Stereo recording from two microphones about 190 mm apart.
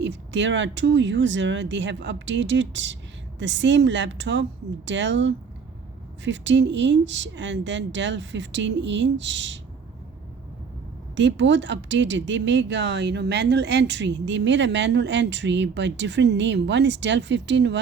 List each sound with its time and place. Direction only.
0.0 s speech: 70° right (ahead or behind)
11.2 s speech: 70° right (ahead or behind)